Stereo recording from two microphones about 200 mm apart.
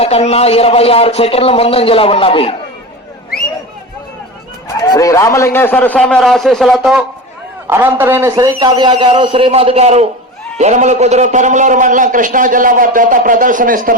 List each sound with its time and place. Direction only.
0.0 s speech: 30° left (ahead or behind)
4.8 s a man's voice: 15° left (ahead or behind); by 8.4 s 15° right (ahead or behind)
8.4 s a man's voice: 25° right (ahead or behind); by 13.9 s 40° right (ahead or behind)